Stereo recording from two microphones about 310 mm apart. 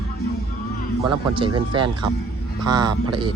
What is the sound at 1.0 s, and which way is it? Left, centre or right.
Speech, centre.